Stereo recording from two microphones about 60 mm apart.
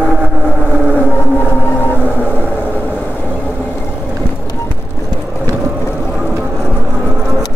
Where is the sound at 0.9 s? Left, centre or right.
Left.